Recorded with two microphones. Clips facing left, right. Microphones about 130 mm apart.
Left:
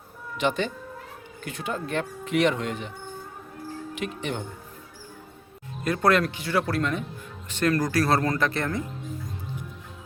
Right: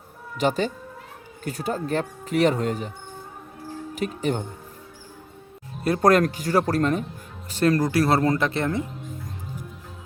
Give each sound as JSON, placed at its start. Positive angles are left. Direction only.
{"t": 0.3, "sound": "speech", "side_deg": -40}
{"t": 3.9, "sound": "speech", "side_deg": -40}
{"t": 5.8, "sound": "speech", "side_deg": -35}